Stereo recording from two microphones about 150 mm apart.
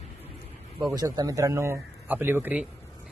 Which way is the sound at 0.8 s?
25° right (ahead or behind).